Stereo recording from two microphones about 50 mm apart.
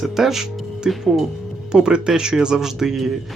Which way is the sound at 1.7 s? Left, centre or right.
Centre.